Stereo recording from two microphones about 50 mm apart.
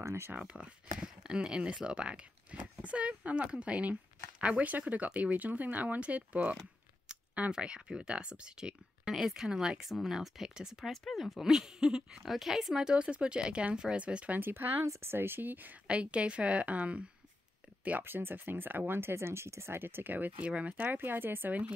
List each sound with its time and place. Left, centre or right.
0.0 s speech: right
0.5 s speech: right
7.5 s speech: centre
10.9 s speech: centre; by 14.4 s right
14.4 s speech: right
14.9 s speech: right
15.9 s speech: right
18.0 s speech: right
20.4 s speech: right
20.7 s speech: right